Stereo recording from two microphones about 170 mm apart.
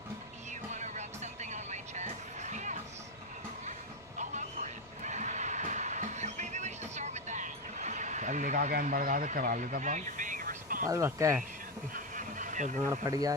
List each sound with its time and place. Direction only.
0.5 s vehicle: 45° right (ahead or behind)
4.2 s train: 45° right (ahead or behind)
10.8 s speech: 15° right (ahead or behind)
11.9 s bee: 50° right (ahead or behind)